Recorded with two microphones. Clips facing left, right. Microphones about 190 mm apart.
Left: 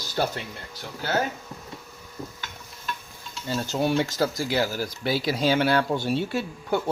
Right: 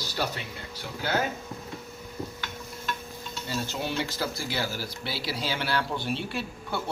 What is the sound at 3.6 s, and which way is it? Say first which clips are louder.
Speech: left 11 dB; 45° left (ahead or behind).